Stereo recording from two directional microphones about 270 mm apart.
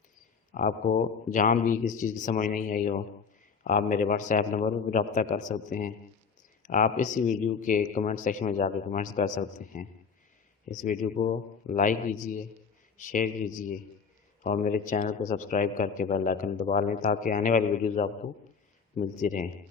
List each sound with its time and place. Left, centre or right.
0.5 s a man's voice: left